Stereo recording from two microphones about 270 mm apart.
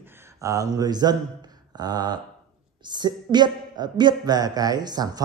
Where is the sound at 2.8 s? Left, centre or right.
Centre.